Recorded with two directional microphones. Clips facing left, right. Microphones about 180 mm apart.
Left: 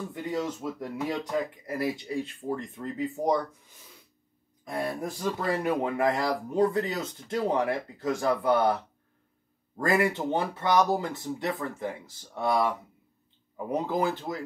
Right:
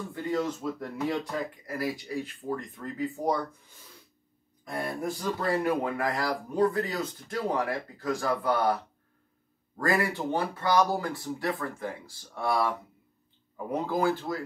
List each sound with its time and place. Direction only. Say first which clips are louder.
0.1 s speech: right 4 dB; 15° left (ahead or behind)
4.6 s speech: left 1 dB; 20° left (ahead or behind)
9.8 s speech: left 2 dB; 20° left (ahead or behind)